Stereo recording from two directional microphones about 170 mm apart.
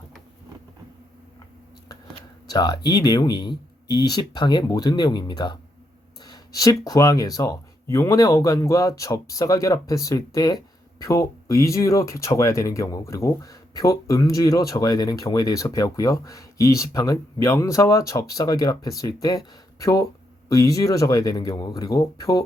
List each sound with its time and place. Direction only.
2.5 s speech: 25° left (ahead or behind)